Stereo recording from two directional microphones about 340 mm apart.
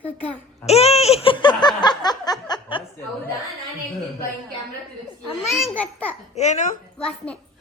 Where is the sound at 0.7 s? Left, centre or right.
Centre.